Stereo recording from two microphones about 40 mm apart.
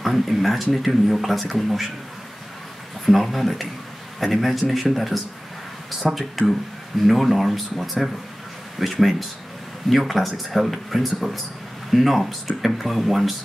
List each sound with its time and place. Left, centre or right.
0.0 s speech: centre
3.1 s speech: centre